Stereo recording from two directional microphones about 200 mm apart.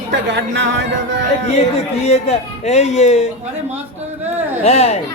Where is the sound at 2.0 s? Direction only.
30° left (ahead or behind).